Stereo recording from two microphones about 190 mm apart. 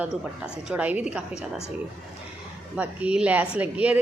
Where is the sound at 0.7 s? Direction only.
10° right (ahead or behind).